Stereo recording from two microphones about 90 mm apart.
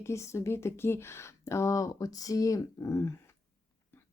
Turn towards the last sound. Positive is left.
turn(degrees=35)  # may be behind; listen again after turning